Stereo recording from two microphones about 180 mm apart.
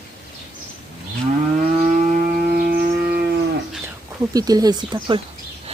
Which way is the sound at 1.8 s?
45° right (ahead or behind).